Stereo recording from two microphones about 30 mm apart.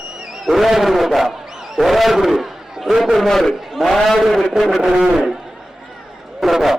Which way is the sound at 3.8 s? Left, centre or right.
Centre.